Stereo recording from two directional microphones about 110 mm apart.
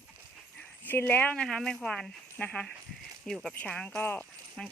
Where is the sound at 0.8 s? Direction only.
15° left (ahead or behind).